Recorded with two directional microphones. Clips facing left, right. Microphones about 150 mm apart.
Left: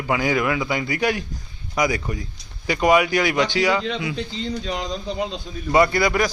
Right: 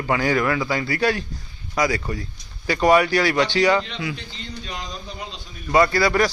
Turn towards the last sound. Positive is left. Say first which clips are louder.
# right 1 dB
turn(degrees=15)  # may be behind; listen again after turning